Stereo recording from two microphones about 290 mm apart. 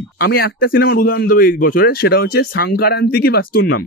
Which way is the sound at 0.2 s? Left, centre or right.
Left.